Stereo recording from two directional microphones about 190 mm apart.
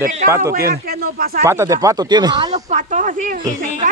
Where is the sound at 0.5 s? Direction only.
55° right (ahead or behind).